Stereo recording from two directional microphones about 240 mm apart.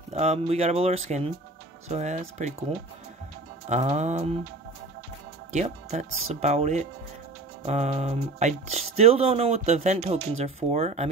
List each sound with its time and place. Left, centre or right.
0.1 s speech: right
3.6 s speech: right
5.5 s speech: right